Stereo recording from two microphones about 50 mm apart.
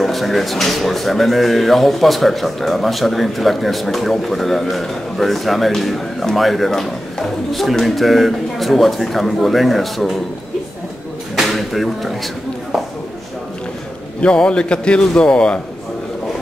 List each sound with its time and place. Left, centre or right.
0.0 s speech: centre
11.4 s speech: centre
14.2 s speech: centre